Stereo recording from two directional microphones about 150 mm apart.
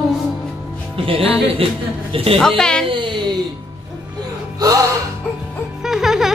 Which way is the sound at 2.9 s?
35° right (ahead or behind).